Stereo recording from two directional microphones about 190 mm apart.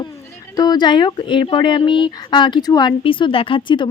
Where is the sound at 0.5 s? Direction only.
20° left (ahead or behind).